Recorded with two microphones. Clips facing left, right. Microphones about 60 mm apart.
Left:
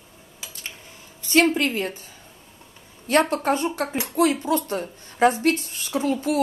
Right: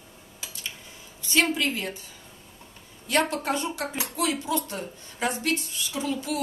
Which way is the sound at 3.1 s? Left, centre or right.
Left.